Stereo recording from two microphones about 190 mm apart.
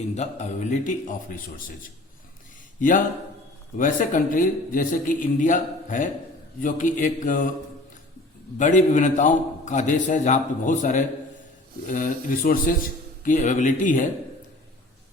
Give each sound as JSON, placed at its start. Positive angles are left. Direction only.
{"t": 0.1, "sound": "a man's voice", "side_deg": 35}
{"t": 3.8, "sound": "a man's voice", "side_deg": 45}
{"t": 8.5, "sound": "a man's voice", "side_deg": 40}